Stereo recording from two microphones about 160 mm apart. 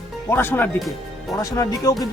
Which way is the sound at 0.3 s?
15° left (ahead or behind).